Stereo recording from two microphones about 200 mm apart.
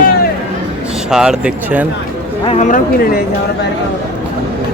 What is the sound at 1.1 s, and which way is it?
Speech, 5° right (ahead or behind).